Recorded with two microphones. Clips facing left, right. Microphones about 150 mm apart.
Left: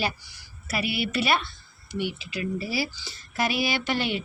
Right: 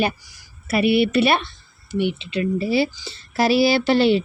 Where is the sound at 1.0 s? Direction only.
65° right (ahead or behind).